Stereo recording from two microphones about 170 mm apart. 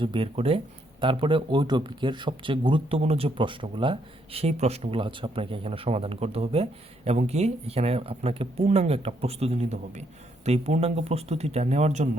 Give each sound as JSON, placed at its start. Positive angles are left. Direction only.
{"t": 0.0, "sound": "speech", "side_deg": -30}